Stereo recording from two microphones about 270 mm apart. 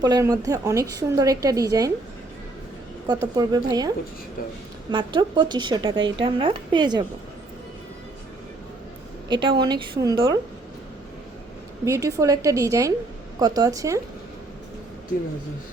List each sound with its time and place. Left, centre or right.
0.0 s a woman's voice: centre
3.1 s a woman's voice: centre
9.3 s a woman's voice: centre
11.9 s a woman's voice: centre